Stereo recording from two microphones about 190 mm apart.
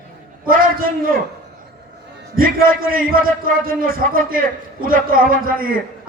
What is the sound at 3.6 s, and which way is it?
A man's voice, 50° right (ahead or behind).